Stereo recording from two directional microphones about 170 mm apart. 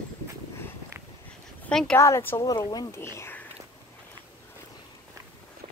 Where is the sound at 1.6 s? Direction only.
5° left (ahead or behind).